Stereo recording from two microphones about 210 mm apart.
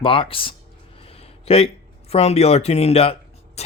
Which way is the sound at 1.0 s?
30° left (ahead or behind).